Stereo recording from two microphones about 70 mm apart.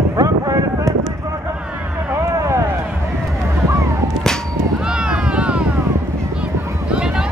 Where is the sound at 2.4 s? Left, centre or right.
Right.